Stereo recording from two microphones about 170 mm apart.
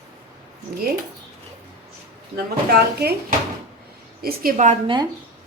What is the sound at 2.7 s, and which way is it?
Speech, 65° right (ahead or behind).